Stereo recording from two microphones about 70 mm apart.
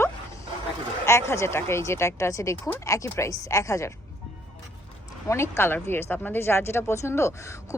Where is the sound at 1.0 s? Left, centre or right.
Left.